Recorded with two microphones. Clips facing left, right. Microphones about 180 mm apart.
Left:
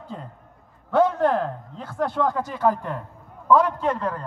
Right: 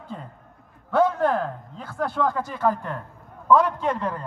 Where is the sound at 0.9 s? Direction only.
15° left (ahead or behind).